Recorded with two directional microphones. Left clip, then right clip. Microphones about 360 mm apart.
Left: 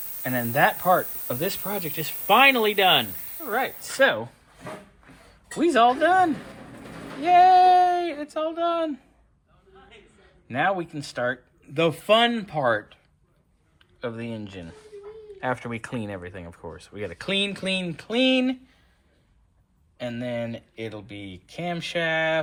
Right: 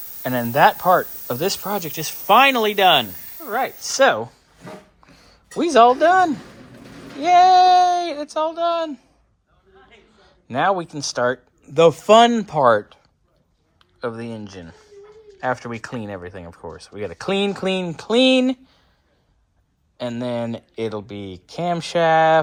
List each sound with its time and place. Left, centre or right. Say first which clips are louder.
0.2 s speech: right 6 dB; centre
5.5 s speech: right 6 dB; centre
10.5 s speech: right 5 dB; centre
20.1 s speech: right 5 dB; centre
22.0 s speech: right 10 dB; right